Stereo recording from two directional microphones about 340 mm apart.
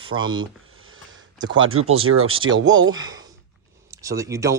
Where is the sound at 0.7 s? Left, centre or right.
Right.